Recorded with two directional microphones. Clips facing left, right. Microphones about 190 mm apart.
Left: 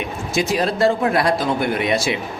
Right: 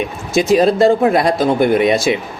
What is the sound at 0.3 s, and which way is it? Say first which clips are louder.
Speech: right 8 dB; 20° right (ahead or behind).